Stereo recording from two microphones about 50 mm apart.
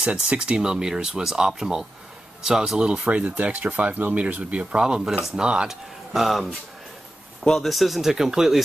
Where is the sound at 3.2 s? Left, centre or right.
Right.